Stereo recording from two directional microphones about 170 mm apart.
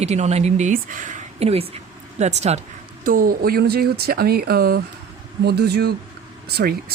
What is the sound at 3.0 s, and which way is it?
Speech, 55° right (ahead or behind).